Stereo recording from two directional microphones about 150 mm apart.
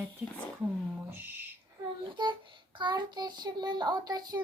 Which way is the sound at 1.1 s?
15° right (ahead or behind).